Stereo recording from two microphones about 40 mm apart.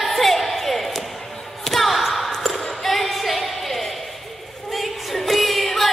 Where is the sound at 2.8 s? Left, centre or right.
Centre.